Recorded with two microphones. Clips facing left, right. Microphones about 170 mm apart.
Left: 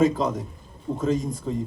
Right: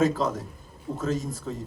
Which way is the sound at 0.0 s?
Centre (ahead or behind).